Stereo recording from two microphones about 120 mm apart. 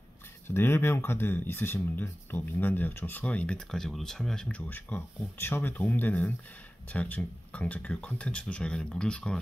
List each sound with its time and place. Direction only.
0.5 s speech: 20° left (ahead or behind)